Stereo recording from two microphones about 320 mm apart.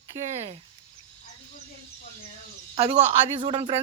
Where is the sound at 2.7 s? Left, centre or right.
Centre.